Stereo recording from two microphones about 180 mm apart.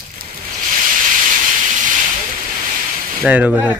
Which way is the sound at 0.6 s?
45° right (ahead or behind).